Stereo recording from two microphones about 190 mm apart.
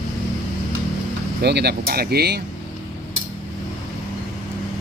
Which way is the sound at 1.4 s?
60° right (ahead or behind).